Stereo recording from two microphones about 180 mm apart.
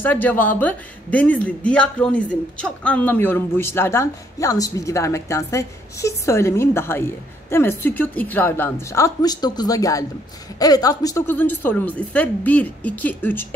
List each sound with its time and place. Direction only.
0.0 s speech: 10° left (ahead or behind)